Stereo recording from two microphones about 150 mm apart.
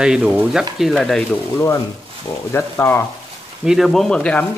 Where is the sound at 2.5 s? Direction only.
15° left (ahead or behind).